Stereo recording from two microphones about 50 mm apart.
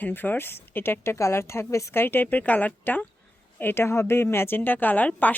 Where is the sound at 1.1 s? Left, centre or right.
Left.